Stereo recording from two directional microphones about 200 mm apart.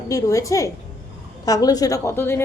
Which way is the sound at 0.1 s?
15° left (ahead or behind).